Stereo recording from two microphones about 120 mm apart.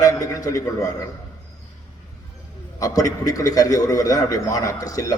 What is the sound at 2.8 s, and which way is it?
A man's voice, 30° left (ahead or behind).